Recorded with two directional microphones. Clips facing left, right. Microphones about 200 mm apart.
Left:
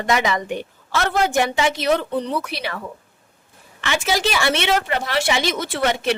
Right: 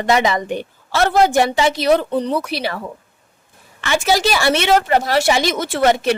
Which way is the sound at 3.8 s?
40° right (ahead or behind).